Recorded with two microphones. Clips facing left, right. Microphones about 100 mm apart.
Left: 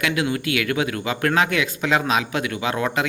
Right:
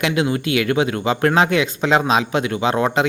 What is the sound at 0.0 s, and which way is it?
A man's voice, 25° right (ahead or behind).